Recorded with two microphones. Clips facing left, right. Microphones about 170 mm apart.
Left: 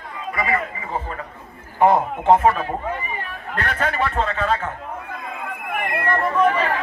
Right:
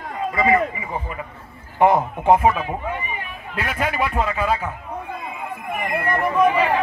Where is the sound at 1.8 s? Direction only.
15° right (ahead or behind).